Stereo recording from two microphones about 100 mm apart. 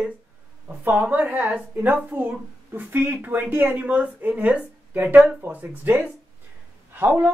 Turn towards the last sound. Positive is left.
turn(degrees=-20)  # may be behind; listen again after turning